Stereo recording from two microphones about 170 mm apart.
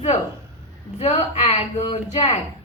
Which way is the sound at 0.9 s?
40° left (ahead or behind).